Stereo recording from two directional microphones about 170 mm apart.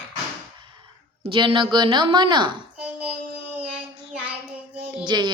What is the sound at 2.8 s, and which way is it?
Child singing, 10° right (ahead or behind).